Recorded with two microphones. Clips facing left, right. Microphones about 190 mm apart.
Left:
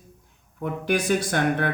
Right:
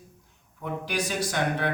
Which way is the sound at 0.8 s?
55° left (ahead or behind).